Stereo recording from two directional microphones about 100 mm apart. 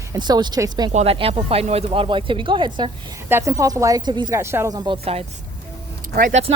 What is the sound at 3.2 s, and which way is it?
Speech, 25° right (ahead or behind).